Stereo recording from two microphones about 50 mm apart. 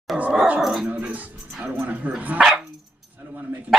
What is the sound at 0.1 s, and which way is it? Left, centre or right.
Dog, centre.